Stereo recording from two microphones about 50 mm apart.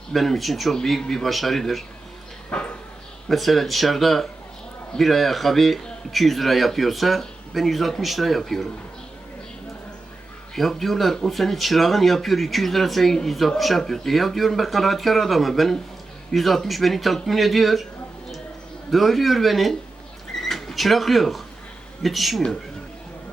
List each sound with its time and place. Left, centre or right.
0.1 s a man's voice: centre
2.5 s a sound: left
3.2 s a man's voice: centre
10.5 s a man's voice: centre
18.9 s a man's voice: centre